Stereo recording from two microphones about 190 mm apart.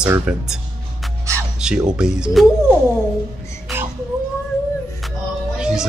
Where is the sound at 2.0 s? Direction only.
5° right (ahead or behind).